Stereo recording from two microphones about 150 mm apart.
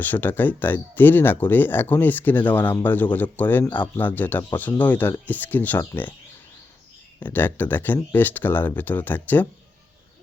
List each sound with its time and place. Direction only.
0.0 s speech: 10° left (ahead or behind)
7.2 s speech: 10° left (ahead or behind)